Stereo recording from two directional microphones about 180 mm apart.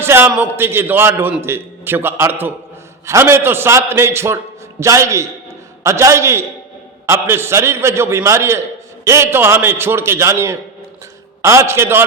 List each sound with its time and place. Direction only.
0.0 s a man's voice: 10° right (ahead or behind)